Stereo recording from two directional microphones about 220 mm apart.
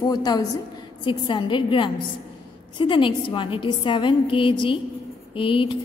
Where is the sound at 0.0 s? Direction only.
20° left (ahead or behind).